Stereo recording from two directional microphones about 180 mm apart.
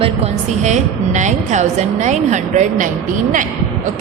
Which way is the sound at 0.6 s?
40° right (ahead or behind).